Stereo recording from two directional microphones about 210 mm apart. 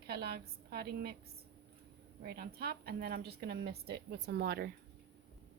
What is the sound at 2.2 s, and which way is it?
A woman's voice, 45° right (ahead or behind).